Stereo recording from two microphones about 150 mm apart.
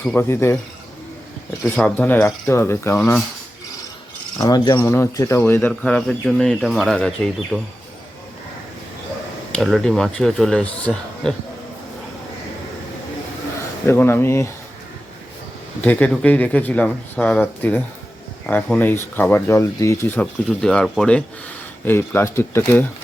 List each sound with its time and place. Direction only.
0.0 s speech: 15° left (ahead or behind)
1.6 s speech: 10° left (ahead or behind)
4.4 s speech: 25° left (ahead or behind); by 7.7 s centre (ahead or behind)
9.5 s speech: centre (ahead or behind)
13.8 s speech: 15° left (ahead or behind)
15.8 s speech: 10° left (ahead or behind)
20.5 s speech: 5° left (ahead or behind)
21.8 s speech: 15° left (ahead or behind)